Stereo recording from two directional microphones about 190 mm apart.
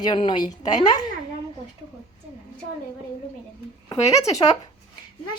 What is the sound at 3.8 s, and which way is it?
Speech, 15° left (ahead or behind).